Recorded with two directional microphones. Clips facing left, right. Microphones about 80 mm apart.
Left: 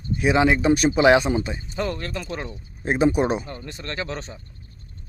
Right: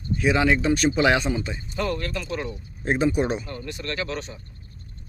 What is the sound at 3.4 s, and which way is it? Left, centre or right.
Speech, left.